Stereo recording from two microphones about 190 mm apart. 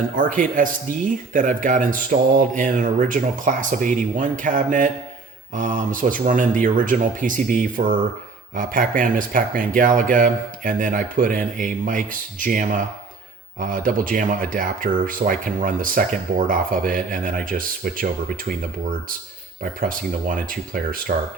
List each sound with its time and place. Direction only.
0.2 s speech: 45° right (ahead or behind)